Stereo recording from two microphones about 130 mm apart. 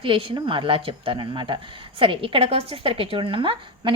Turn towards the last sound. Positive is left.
turn(degrees=-40)  # may be behind; listen again after turning